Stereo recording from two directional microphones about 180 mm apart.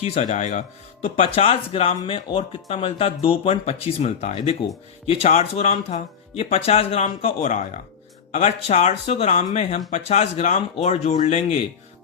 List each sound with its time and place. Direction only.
0.0 s speech: 40° left (ahead or behind)